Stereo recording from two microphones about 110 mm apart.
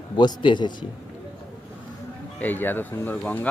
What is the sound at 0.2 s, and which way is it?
Speech, 45° left (ahead or behind).